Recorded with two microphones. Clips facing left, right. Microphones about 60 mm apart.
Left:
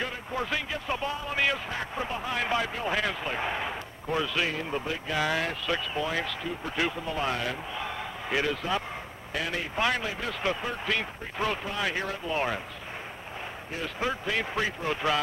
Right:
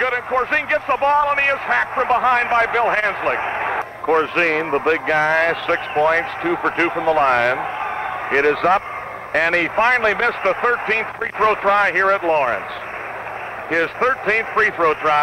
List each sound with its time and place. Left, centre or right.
0.0 s speech: right
2.4 s speech: right
3.7 s speech: right
5.2 s speech: right
7.8 s a sound: right
9.3 s speech: right
9.8 s speech: right
10.0 s speech: right
10.4 s speech: right
13.9 s speech: right